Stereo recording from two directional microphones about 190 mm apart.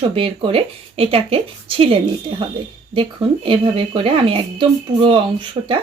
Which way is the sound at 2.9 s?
30° right (ahead or behind).